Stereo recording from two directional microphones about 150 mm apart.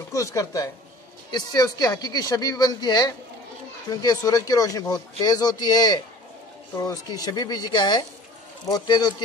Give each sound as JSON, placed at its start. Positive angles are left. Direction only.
{"t": 0.1, "sound": "speech", "side_deg": 20}